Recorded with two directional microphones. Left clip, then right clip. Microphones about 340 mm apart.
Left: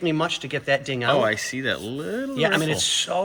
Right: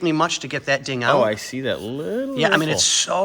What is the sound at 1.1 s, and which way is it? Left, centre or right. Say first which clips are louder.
Speech: right 3 dB; centre.